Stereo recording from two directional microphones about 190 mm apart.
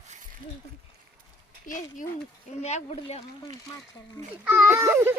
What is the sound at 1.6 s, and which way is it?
Speech, 45° left (ahead or behind).